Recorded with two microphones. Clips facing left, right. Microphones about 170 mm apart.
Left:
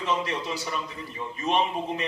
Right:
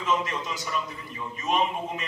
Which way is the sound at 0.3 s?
35° left (ahead or behind).